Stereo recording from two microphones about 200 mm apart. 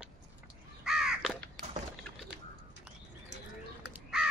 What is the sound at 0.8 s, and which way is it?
Crow, centre (ahead or behind).